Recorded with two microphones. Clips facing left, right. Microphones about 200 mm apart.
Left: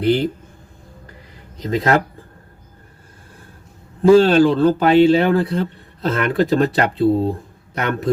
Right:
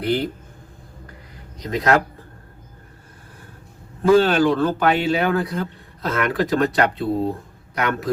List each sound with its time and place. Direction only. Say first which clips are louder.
0.0 s a man's voice: left 5 dB; 25° left (ahead or behind)
1.6 s a man's voice: left 2 dB; 25° left (ahead or behind)
4.2 s a man's voice: left 4 dB; 30° left (ahead or behind)